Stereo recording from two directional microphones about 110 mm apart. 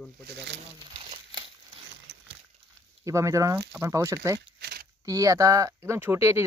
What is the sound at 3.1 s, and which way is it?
Speech, 30° right (ahead or behind).